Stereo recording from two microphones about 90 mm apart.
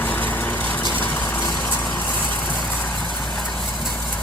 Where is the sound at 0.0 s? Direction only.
20° left (ahead or behind).